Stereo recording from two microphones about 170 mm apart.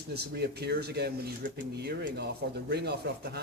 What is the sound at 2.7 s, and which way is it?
Speech, 75° right (ahead or behind).